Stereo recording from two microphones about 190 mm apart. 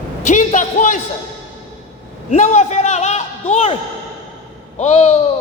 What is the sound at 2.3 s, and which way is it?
A man's voice, 40° left (ahead or behind).